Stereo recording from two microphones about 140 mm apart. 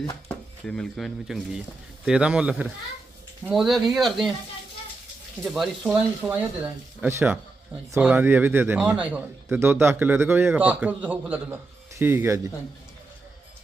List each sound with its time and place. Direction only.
0.3 s a man's voice: 5° left (ahead or behind)
5.5 s speech: centre (ahead or behind)
5.9 s a man's voice: 10° right (ahead or behind)